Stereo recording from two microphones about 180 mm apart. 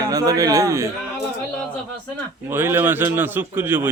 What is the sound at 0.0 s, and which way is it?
Speech, 20° right (ahead or behind).